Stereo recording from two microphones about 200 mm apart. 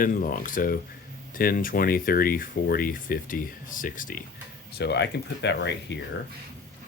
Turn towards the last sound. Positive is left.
turn(degrees=60)  # may be behind; listen again after turning